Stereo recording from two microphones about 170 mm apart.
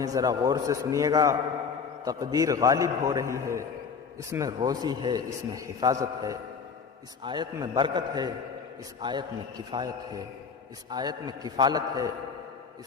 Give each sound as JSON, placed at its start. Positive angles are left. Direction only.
{"t": 0.0, "sound": "a man's voice", "side_deg": -20}